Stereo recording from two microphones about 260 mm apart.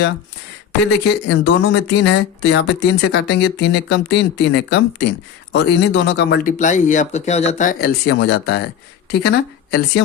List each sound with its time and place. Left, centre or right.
0.9 s speech: left